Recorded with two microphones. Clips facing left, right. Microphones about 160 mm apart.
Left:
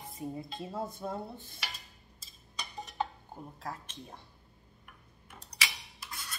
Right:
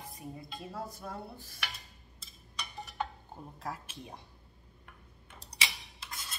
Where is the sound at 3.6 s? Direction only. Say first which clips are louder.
Right 2 dB; centre (ahead or behind).